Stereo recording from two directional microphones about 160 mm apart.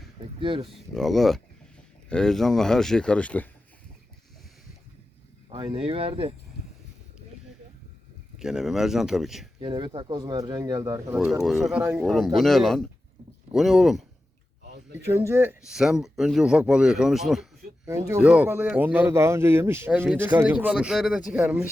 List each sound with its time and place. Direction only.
0.3 s speech: 30° right (ahead or behind)
0.7 s speech: centre (ahead or behind)
5.5 s speech: 30° right (ahead or behind)
8.4 s speech: 5° right (ahead or behind)
9.6 s speech: 30° right (ahead or behind)
11.4 s speech: centre (ahead or behind)
11.8 s speech: 15° right (ahead or behind)
12.0 s speech: centre (ahead or behind)
14.9 s speech: 15° right (ahead or behind)
15.6 s speech: 5° right (ahead or behind)
17.8 s speech: 15° right (ahead or behind)